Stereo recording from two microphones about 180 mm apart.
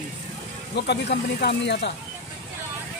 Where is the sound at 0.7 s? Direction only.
65° left (ahead or behind).